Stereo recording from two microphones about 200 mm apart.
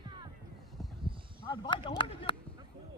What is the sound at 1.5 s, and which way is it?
Speech, 25° left (ahead or behind).